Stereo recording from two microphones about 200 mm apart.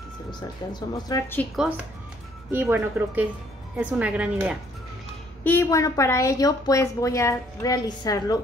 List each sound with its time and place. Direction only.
0.3 s a woman's voice: 20° left (ahead or behind)
2.5 s a woman's voice: 10° right (ahead or behind)
5.4 s a woman's voice: 10° left (ahead or behind)